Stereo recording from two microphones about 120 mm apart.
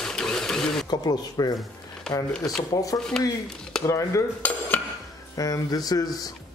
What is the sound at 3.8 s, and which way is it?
Cutlery, 25° left (ahead or behind).